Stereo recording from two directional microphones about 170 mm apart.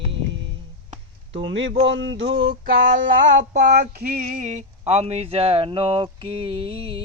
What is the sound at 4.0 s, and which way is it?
Speech, 55° right (ahead or behind).